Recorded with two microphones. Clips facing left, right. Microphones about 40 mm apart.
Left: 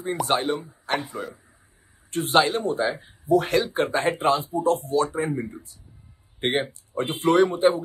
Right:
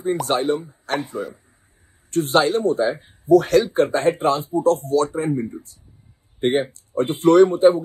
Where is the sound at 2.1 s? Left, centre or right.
Left.